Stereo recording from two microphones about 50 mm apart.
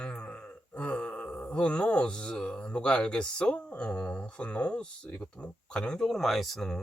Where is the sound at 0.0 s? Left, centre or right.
Centre.